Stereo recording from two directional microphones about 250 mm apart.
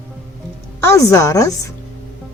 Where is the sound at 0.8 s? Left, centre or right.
Centre.